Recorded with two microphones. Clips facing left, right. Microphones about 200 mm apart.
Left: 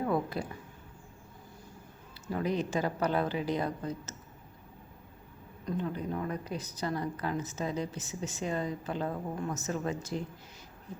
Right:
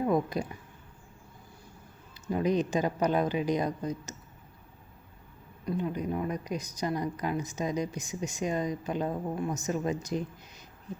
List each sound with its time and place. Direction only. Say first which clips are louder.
0.0 s speech: right 3 dB; 15° right (ahead or behind)
2.2 s speech: right 4 dB; 20° right (ahead or behind)
5.6 s speech: right 3 dB; 10° right (ahead or behind)